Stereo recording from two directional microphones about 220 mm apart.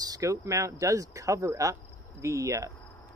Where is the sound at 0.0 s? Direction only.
15° right (ahead or behind).